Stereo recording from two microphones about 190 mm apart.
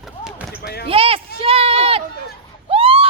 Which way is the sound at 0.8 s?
30° right (ahead or behind).